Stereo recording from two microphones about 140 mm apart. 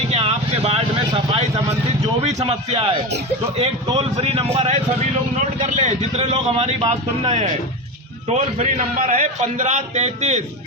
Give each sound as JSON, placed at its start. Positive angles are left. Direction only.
{"t": 0.1, "sound": "vehicle", "side_deg": -45}
{"t": 2.2, "sound": "speech", "side_deg": -50}
{"t": 3.9, "sound": "speech", "side_deg": -45}
{"t": 5.4, "sound": "speech", "side_deg": -60}
{"t": 8.3, "sound": "a man's voice", "side_deg": -60}